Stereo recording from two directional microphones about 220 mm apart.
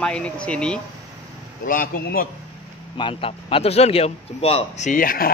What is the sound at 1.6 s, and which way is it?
Speech, 40° left (ahead or behind).